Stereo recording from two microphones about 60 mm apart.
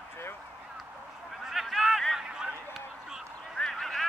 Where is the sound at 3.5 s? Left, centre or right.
Centre.